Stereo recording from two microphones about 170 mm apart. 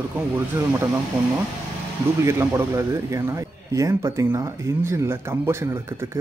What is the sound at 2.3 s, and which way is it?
A man's voice, 15° right (ahead or behind).